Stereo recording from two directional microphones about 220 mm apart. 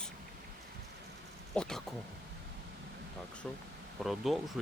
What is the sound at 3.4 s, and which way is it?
Speech, 5° left (ahead or behind).